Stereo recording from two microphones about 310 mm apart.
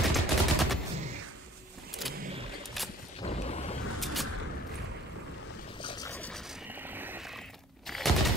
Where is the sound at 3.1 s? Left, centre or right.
Centre.